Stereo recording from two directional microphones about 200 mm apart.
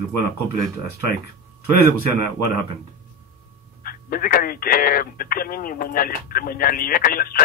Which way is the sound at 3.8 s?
45° left (ahead or behind).